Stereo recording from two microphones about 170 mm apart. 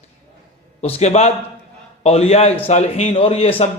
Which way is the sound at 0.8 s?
40° left (ahead or behind).